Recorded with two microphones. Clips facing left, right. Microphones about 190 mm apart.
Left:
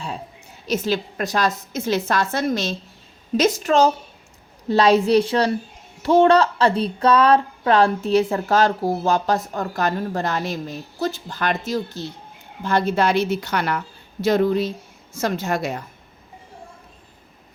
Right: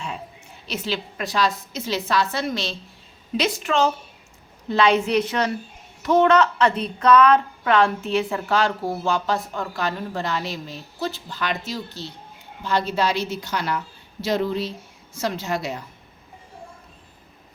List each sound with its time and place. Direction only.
0.6 s a woman's voice: 45° left (ahead or behind)